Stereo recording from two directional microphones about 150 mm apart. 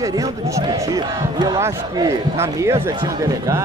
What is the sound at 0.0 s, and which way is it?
Speech, 25° right (ahead or behind).